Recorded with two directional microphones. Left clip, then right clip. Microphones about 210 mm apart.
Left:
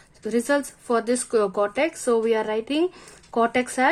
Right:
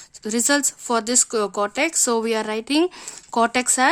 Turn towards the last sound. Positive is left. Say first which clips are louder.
# right 2 dB
turn(degrees=-25)  # may be behind; listen again after turning